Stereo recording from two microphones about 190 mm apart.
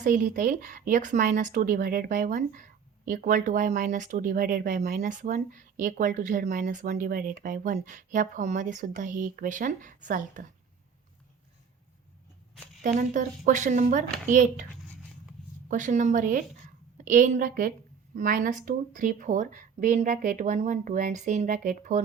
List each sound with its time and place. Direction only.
0.0 s speech: 45° right (ahead or behind)
12.8 s speech: 45° right (ahead or behind)
15.7 s speech: 40° right (ahead or behind)